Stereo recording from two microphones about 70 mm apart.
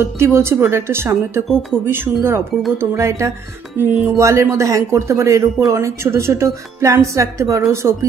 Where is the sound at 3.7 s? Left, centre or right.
Right.